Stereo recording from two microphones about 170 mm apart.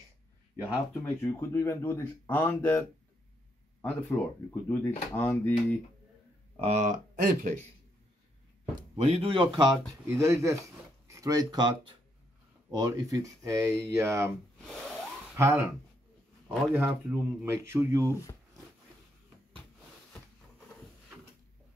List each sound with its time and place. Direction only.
1.0 s speech: 15° left (ahead or behind)
3.8 s speech: 5° left (ahead or behind)
6.5 s speech: 40° right (ahead or behind)
8.9 s speech: 40° right (ahead or behind)
10.0 s speech: 15° right (ahead or behind)
12.7 s speech: 20° right (ahead or behind)
15.3 s speech: 15° right (ahead or behind)